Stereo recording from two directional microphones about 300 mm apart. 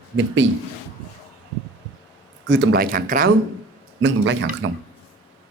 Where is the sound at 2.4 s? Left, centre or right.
Right.